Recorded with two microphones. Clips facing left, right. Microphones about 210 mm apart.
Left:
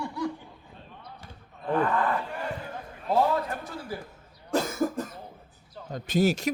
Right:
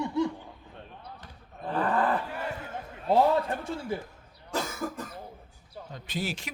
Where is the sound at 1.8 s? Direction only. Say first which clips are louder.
Right 1 dB; 35° right (ahead or behind).